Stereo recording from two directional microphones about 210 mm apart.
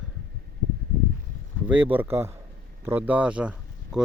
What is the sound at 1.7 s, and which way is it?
Speech, 10° right (ahead or behind).